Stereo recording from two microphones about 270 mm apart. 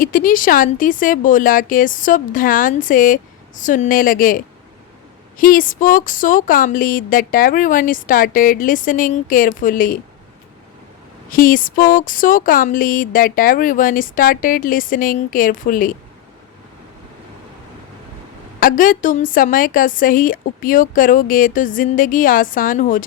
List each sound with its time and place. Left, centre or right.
0.0 s speech: left
11.3 s speech: left
18.6 s speech: left